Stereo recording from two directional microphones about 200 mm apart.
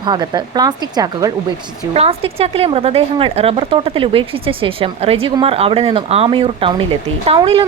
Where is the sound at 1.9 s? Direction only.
30° right (ahead or behind).